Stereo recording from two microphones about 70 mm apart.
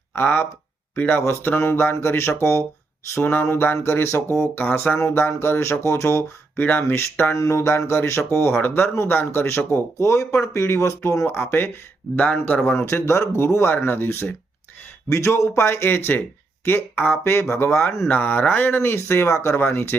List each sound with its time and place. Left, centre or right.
0.1 s speech: left
6.6 s speech: left
7.3 s speech: left
11.3 s speech: left
12.6 s speech: left
15.1 s speech: left